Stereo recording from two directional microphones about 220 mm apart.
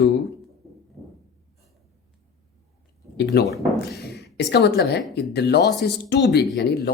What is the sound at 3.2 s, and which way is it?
A woman's voice, 50° left (ahead or behind).